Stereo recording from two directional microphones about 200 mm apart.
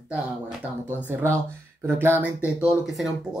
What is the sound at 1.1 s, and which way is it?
Speech, 15° right (ahead or behind).